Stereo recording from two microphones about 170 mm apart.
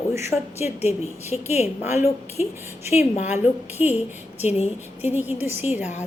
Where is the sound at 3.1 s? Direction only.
45° left (ahead or behind).